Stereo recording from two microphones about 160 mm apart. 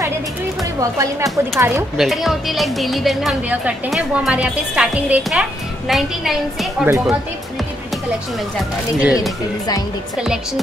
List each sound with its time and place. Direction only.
0.7 s speech: 20° right (ahead or behind)
2.0 s speech: centre (ahead or behind)
9.0 s speech: 5° right (ahead or behind)